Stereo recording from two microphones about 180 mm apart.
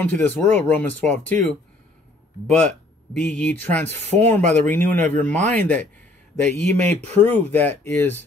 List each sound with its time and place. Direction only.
0.0 s speech: 5° left (ahead or behind)
6.8 s speech: 35° right (ahead or behind)
7.2 s speech: 10° left (ahead or behind)